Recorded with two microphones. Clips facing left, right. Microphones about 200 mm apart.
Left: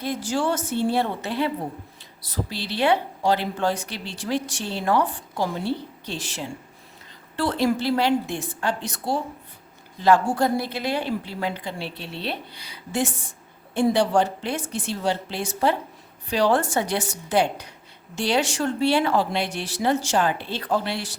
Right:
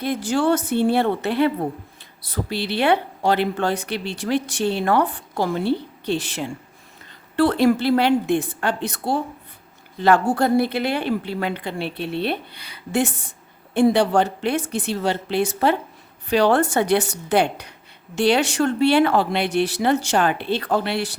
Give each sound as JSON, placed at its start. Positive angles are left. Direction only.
{"t": 0.0, "sound": "speech", "side_deg": -60}